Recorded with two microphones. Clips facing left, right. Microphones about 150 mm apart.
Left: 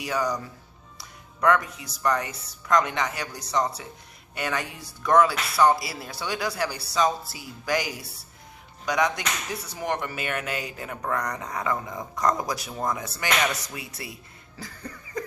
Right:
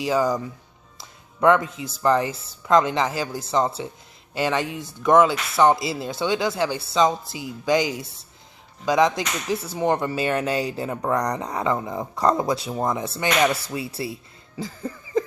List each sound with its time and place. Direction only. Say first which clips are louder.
0.0 s speech: right 6 dB; 25° right (ahead or behind)